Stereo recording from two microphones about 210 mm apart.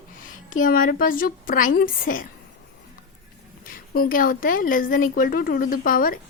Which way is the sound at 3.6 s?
45° left (ahead or behind).